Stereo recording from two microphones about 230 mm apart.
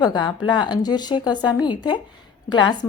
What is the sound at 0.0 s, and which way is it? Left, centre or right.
A woman's voice, centre.